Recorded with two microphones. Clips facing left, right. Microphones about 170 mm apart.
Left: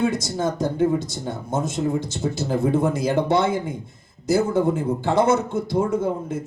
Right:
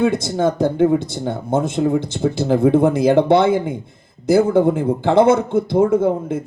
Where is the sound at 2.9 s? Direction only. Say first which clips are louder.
Right 7 dB; 55° right (ahead or behind).